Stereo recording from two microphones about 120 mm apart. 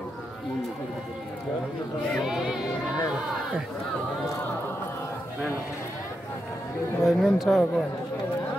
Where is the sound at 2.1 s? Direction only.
Centre (ahead or behind).